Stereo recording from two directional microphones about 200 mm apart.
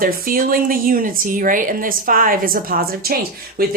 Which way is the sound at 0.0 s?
45° right (ahead or behind).